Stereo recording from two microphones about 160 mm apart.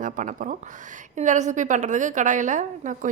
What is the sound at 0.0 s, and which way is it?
A woman's voice, 55° right (ahead or behind).